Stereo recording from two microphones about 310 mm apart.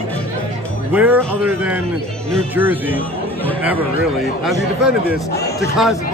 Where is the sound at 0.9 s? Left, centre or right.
Centre.